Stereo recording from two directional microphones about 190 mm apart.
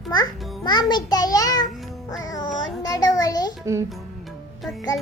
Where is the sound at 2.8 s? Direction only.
20° left (ahead or behind).